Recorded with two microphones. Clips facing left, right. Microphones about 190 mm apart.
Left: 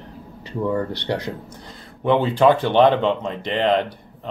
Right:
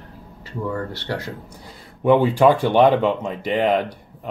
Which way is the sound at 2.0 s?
10° right (ahead or behind).